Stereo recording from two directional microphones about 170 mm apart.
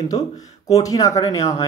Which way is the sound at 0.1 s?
20° left (ahead or behind).